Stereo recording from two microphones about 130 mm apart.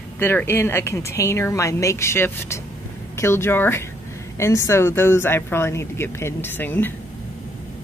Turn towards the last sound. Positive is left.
turn(degrees=15)  # may be behind; listen again after turning